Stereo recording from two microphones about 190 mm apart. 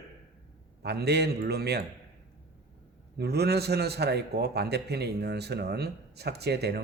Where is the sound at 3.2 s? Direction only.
60° right (ahead or behind).